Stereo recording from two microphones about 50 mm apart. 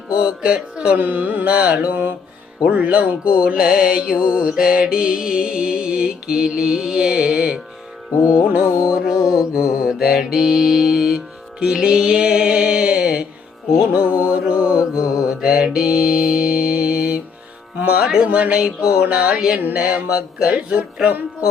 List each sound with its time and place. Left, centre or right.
0.1 s music: right
0.9 s carnatic music: right
1.5 s music: right
3.6 s music: centre
4.2 s music: right
8.9 s music: centre
11.6 s music: centre
15.3 s mantra: centre
17.8 s music: centre
19.5 s carnatic music: right
19.8 s music: right